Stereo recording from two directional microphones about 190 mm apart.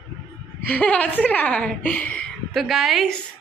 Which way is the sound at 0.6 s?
5° left (ahead or behind).